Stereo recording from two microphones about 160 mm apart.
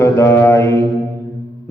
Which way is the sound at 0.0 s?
15° left (ahead or behind).